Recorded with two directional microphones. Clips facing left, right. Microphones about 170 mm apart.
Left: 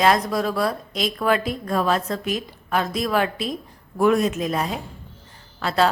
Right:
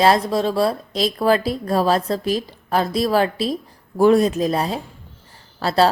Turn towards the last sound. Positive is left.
turn(degrees=-35)  # may be behind; listen again after turning